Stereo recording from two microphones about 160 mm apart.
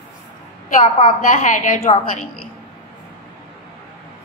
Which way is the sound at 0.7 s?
55° left (ahead or behind).